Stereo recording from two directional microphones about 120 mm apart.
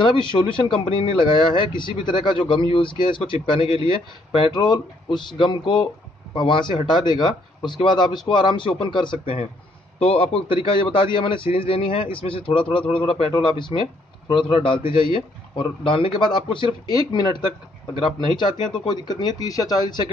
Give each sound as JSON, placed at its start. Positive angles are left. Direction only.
{"t": 0.0, "sound": "speech", "side_deg": 40}